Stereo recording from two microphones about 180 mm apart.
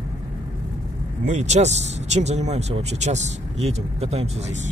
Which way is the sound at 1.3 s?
40° right (ahead or behind).